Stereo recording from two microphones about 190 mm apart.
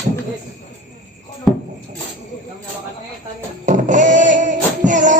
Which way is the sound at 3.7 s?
40° right (ahead or behind).